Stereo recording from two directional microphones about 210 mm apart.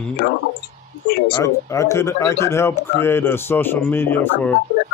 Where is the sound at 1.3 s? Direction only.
15° left (ahead or behind).